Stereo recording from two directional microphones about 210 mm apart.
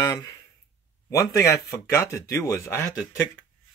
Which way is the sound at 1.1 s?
15° left (ahead or behind).